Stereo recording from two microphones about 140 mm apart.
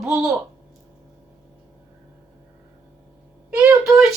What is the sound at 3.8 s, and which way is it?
Speech, centre (ahead or behind).